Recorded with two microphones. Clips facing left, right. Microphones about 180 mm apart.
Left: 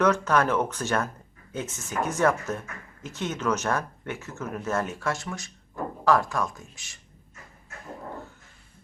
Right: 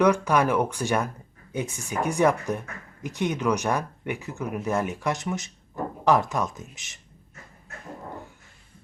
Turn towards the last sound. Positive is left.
turn(degrees=-20)  # may be behind; listen again after turning